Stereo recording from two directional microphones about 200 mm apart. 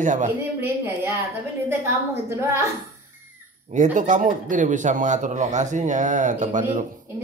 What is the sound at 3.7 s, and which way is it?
Speech, 40° right (ahead or behind).